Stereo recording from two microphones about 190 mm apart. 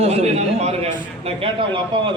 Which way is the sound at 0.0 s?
35° right (ahead or behind).